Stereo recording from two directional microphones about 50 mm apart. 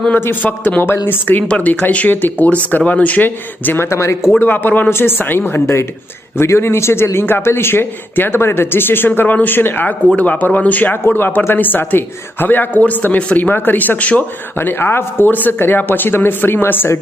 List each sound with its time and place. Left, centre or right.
0.4 s a man's voice: left
1.5 s a man's voice: left
3.8 s speech: left
4.4 s speech: left
6.3 s a man's voice: left
14.6 s speech: left